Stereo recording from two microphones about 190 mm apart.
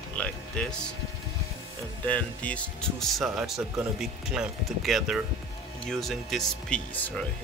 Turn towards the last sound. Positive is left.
turn(degrees=5)  # may be behind; listen again after turning